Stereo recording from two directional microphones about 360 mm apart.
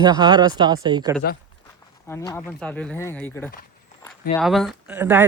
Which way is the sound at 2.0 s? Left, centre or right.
Centre.